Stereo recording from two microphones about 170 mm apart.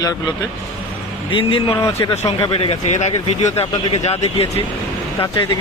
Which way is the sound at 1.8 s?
20° left (ahead or behind).